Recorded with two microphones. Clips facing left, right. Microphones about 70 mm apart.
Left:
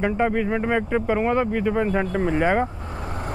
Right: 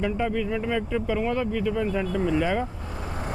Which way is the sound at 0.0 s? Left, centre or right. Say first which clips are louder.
Left 4 dB; left.